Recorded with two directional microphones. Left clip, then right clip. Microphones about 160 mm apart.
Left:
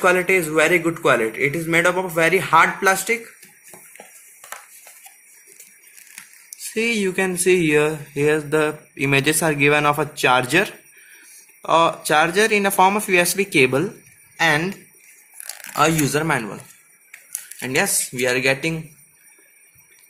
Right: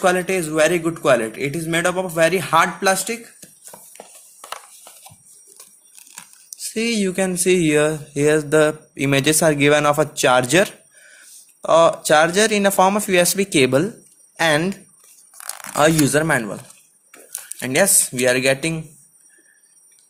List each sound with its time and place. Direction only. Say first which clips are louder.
0.0 s speech: left 2 dB; 45° right (ahead or behind)
6.6 s speech: left 1 dB; 35° right (ahead or behind)
15.8 s speech: right 2 dB; 45° right (ahead or behind)
17.6 s speech: right 3 dB; 45° right (ahead or behind)